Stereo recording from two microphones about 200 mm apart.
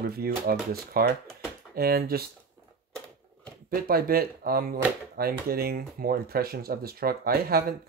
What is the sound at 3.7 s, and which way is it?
Speech, 45° right (ahead or behind).